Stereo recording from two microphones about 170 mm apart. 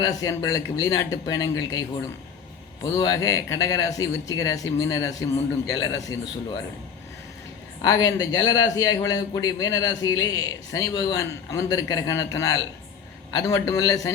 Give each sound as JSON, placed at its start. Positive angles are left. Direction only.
{"t": 0.0, "sound": "a man's voice", "side_deg": 20}
{"t": 2.8, "sound": "a man's voice", "side_deg": 20}
{"t": 7.8, "sound": "a man's voice", "side_deg": 20}